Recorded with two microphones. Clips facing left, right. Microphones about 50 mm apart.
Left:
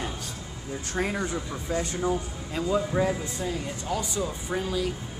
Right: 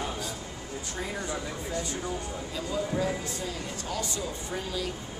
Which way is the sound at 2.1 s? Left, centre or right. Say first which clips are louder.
Left 5 dB; left.